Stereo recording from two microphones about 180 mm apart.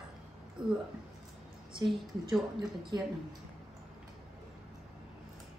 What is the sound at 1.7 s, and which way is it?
A woman's voice, 25° right (ahead or behind).